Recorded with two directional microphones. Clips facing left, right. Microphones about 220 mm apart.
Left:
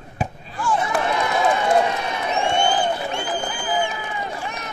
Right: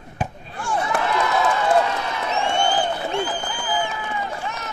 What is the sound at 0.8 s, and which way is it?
Run, 20° left (ahead or behind).